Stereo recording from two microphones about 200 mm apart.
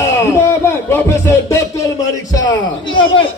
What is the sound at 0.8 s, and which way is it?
Music, 10° left (ahead or behind).